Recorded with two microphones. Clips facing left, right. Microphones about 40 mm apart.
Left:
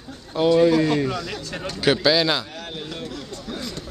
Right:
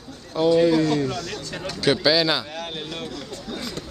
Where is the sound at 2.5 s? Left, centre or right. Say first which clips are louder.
Right 2 dB; right.